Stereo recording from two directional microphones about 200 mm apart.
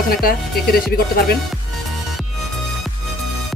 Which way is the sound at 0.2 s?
50° left (ahead or behind).